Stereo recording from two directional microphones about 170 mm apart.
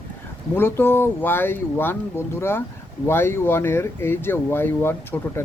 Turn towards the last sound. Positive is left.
turn(degrees=15)  # may be behind; listen again after turning